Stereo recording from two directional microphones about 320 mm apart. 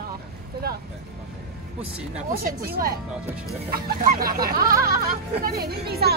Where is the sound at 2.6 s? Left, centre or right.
Right.